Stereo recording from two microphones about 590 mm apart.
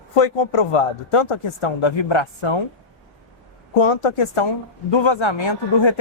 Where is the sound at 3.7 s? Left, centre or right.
Left.